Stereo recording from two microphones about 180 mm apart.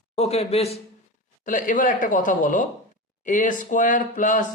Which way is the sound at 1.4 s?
50° left (ahead or behind).